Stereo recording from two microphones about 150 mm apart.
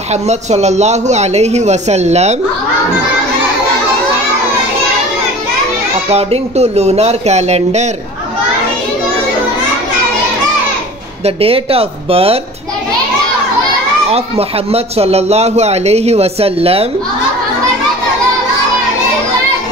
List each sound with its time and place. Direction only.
0.1 s speech: 50° right (ahead or behind)
6.0 s speech: 45° right (ahead or behind)
11.2 s speech: 40° right (ahead or behind)
14.1 s speech: 40° right (ahead or behind)